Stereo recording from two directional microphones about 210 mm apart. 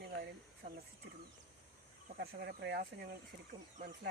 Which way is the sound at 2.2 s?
50° right (ahead or behind).